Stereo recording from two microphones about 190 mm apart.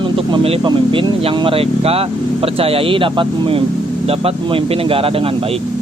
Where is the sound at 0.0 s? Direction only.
25° right (ahead or behind).